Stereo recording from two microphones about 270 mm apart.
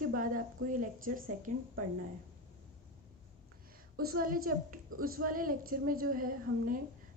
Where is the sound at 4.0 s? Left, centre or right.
Right.